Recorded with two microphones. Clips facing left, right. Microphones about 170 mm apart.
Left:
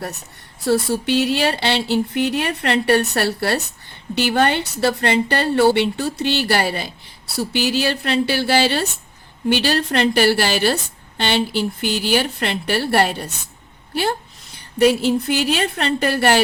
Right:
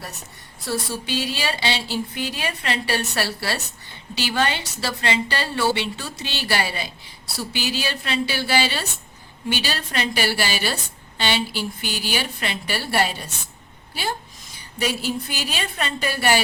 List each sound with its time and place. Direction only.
0.6 s a woman's voice: 60° left (ahead or behind)